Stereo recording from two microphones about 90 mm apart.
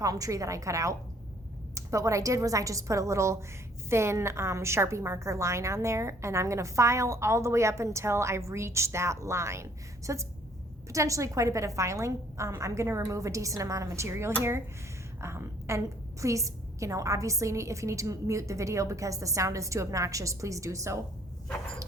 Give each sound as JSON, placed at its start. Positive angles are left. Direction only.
{"t": 0.0, "sound": "a woman's voice", "side_deg": -40}